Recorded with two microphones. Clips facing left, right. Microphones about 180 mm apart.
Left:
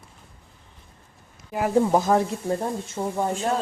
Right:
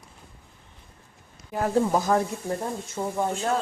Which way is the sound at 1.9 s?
20° left (ahead or behind).